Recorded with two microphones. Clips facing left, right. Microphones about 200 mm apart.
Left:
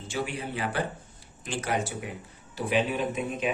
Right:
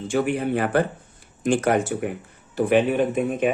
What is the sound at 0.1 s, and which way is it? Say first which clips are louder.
Speech: right 10 dB; 55° right (ahead or behind).